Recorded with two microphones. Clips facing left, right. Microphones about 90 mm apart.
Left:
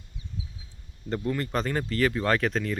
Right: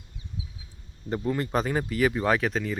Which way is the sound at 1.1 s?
15° right (ahead or behind).